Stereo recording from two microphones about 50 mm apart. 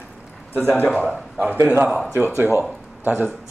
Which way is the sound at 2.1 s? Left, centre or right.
Left.